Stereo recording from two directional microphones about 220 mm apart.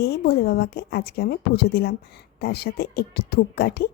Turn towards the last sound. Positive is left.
turn(degrees=45)  # may be behind; listen again after turning